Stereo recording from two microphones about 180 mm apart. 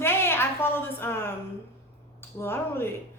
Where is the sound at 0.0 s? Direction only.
15° left (ahead or behind).